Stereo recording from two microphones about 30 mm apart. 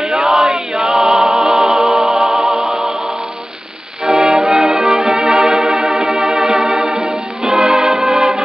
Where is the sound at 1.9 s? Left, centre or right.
Centre.